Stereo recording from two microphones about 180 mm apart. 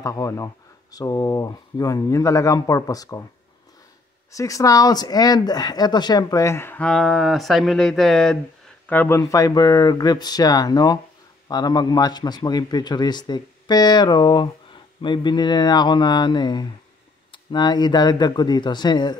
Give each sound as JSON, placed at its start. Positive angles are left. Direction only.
{"t": 0.0, "sound": "a man's voice", "side_deg": 20}
{"t": 4.3, "sound": "a man's voice", "side_deg": 20}